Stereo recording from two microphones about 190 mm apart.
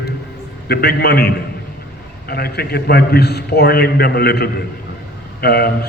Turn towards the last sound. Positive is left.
turn(degrees=55)  # may be behind; listen again after turning